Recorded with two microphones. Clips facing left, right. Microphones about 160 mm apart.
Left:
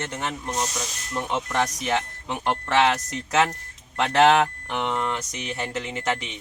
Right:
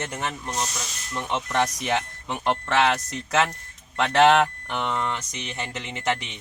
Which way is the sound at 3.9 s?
5° left (ahead or behind).